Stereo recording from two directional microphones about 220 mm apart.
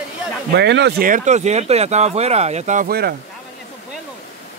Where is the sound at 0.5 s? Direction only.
50° right (ahead or behind).